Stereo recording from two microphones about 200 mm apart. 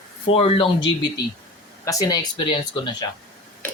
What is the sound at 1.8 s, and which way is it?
Speech, 20° left (ahead or behind).